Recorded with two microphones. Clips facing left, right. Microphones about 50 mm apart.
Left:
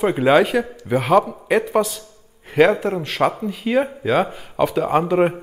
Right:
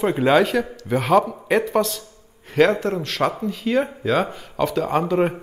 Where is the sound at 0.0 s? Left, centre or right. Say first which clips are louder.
Left 2 dB; centre.